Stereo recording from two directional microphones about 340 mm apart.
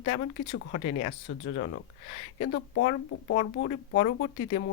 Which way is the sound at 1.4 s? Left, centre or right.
Left.